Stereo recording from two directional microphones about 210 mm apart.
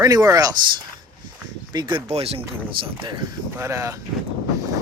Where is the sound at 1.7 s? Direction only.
25° right (ahead or behind).